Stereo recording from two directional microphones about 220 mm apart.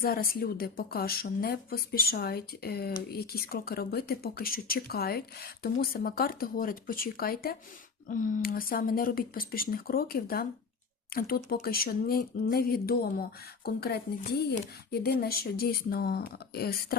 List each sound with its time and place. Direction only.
0.0 s a woman's voice: 40° left (ahead or behind)